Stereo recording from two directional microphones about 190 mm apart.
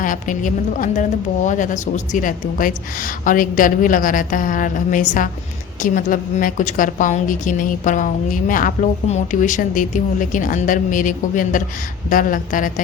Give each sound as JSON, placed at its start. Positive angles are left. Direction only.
{"t": 0.0, "sound": "a woman's voice", "side_deg": 45}